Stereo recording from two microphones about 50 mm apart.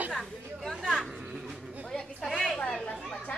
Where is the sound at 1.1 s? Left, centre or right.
Centre.